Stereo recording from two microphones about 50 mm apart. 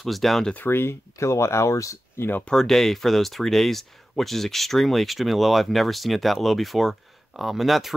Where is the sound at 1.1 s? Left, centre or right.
Left.